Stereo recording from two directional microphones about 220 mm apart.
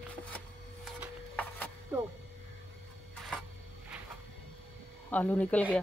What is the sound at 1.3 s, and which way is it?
Music, 5° left (ahead or behind).